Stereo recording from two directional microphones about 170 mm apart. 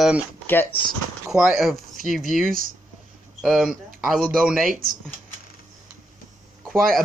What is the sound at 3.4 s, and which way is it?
A man's voice, centre (ahead or behind).